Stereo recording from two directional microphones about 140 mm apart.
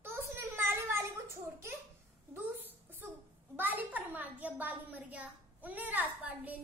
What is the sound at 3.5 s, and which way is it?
A child's voice, 15° right (ahead or behind).